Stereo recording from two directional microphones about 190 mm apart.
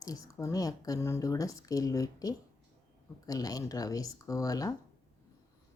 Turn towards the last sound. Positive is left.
turn(degrees=20)  # may be behind; listen again after turning